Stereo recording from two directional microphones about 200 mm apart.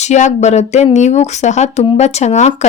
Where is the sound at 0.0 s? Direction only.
35° left (ahead or behind).